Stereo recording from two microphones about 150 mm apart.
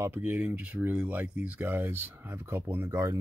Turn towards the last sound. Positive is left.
turn(degrees=-20)  # may be behind; listen again after turning